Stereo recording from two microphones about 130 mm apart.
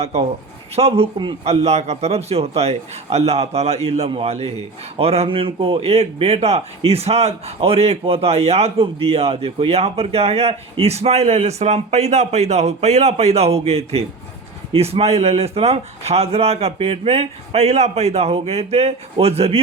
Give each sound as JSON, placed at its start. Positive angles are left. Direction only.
{"t": 0.0, "sound": "a man's voice", "side_deg": -55}